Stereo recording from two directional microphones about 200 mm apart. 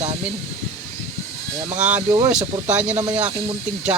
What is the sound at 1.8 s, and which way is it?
Speech, 10° right (ahead or behind).